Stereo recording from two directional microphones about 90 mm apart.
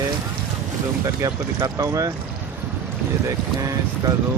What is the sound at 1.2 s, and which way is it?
Speech, 40° right (ahead or behind).